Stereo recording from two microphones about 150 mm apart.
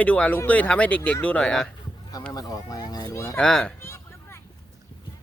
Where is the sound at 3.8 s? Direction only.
15° left (ahead or behind).